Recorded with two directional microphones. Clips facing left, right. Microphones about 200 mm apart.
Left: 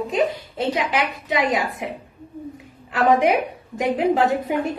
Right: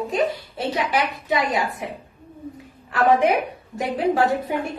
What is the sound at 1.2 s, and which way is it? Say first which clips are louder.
Speech: left 1 dB; 15° left (ahead or behind).